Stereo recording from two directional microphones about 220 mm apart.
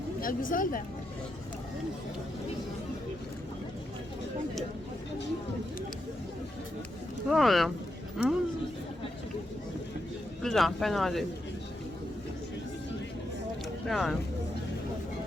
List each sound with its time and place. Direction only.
0.2 s speech: 40° left (ahead or behind)
7.3 s speech: centre (ahead or behind)
10.4 s speech: centre (ahead or behind)
13.8 s speech: centre (ahead or behind)